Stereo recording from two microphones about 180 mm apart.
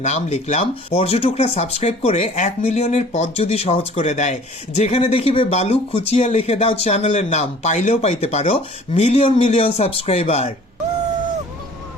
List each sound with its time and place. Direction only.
0.0 s speech: 40° left (ahead or behind)